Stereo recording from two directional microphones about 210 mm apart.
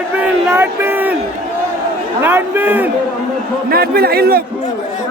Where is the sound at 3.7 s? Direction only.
45° right (ahead or behind).